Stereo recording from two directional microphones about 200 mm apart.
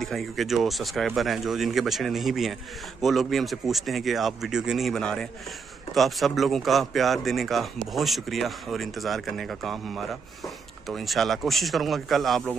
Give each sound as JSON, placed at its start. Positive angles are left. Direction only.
{"t": 0.0, "sound": "speech", "side_deg": 0}